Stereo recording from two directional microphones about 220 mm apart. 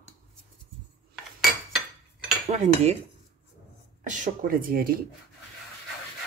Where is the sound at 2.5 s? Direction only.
30° right (ahead or behind).